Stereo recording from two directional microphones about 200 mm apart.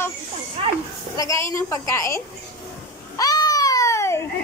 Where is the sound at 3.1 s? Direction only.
20° left (ahead or behind).